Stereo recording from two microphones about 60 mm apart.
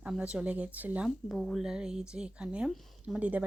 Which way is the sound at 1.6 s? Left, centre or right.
Centre.